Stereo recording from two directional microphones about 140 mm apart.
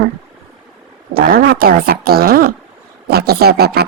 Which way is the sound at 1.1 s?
90° right.